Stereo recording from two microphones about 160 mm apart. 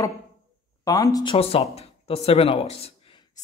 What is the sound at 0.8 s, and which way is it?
Speech, 20° left (ahead or behind).